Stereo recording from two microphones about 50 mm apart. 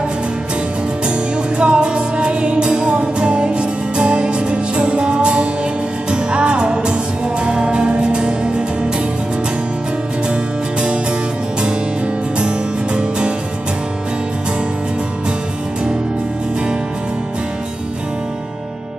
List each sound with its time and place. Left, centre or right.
1.6 s music: centre
12.4 s music: centre